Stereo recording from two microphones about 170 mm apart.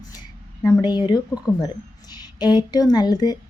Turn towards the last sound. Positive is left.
turn(degrees=25)  # may be behind; listen again after turning